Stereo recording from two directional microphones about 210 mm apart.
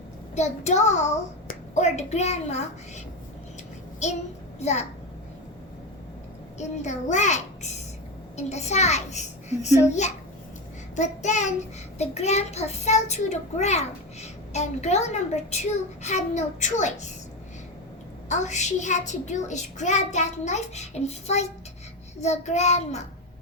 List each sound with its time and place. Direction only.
0.3 s a child's voice: 35° left (ahead or behind)
4.6 s a child's voice: 30° left (ahead or behind)
6.6 s a child's voice: 35° left (ahead or behind)
18.3 s a child's voice: 35° left (ahead or behind)